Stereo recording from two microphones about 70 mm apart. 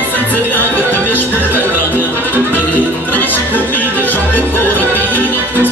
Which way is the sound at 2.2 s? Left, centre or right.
Left.